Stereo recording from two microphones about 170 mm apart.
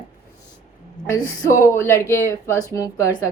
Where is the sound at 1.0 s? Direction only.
15° left (ahead or behind).